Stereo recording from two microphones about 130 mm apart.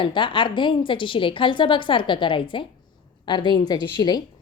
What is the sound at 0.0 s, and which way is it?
A woman's voice, 40° left (ahead or behind).